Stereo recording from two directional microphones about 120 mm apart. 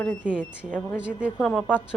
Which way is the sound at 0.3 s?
10° right (ahead or behind).